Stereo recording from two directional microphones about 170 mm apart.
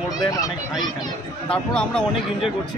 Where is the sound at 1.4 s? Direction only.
5° left (ahead or behind).